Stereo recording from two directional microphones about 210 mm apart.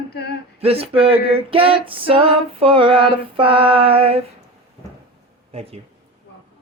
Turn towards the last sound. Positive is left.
turn(degrees=-30)  # may be behind; listen again after turning